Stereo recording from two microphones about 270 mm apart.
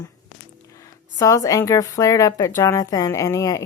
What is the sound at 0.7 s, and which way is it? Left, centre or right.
Speech, centre.